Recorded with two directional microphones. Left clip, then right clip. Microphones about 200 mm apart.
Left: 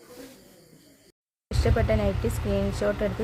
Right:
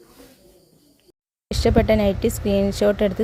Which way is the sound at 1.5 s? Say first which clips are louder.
Right 8 dB; 35° right (ahead or behind).